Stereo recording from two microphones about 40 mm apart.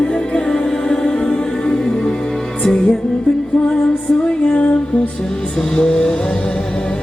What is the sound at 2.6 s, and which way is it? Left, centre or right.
Music, centre.